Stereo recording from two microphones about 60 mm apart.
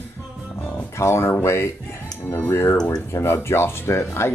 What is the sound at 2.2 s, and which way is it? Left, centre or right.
Speech, left.